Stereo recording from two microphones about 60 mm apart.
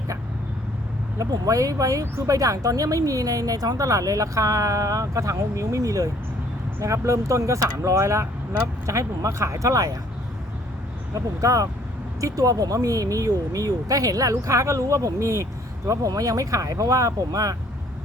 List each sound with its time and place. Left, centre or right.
1.2 s a woman's voice: right
6.7 s speech: right
11.1 s a woman's voice: right
12.2 s a woman's voice: right
15.9 s a woman's voice: right